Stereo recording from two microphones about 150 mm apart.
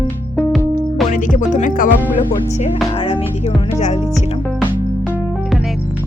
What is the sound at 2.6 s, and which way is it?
Speech, 40° left (ahead or behind).